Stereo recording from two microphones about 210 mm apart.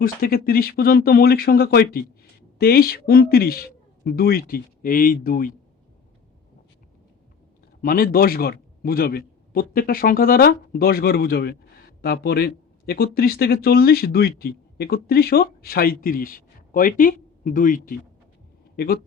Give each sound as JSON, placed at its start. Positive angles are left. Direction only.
{"t": 0.0, "sound": "a man's voice", "side_deg": 45}
{"t": 7.8, "sound": "a man's voice", "side_deg": 45}